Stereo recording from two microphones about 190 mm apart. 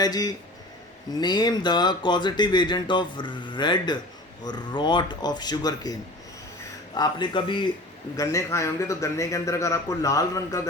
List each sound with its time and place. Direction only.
0.0 s a man's voice: 20° left (ahead or behind)